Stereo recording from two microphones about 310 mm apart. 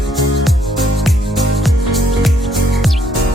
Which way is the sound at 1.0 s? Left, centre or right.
Centre.